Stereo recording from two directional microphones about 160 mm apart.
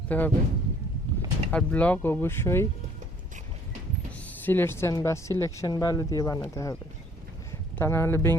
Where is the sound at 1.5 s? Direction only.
10° left (ahead or behind).